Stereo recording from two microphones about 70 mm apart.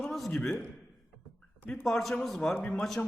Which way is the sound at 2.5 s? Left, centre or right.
Left.